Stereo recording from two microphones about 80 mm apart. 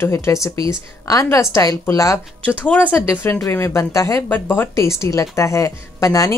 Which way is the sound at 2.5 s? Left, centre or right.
Left.